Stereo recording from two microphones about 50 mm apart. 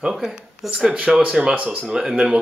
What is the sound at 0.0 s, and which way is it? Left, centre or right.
Speech, centre.